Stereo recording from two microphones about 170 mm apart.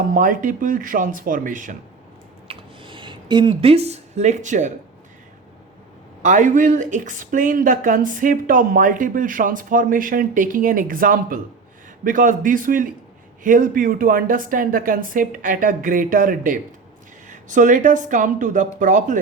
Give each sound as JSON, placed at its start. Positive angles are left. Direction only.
{"t": 0.1, "sound": "speech", "side_deg": -50}
{"t": 2.5, "sound": "a sound", "side_deg": -30}
{"t": 6.2, "sound": "speech", "side_deg": -50}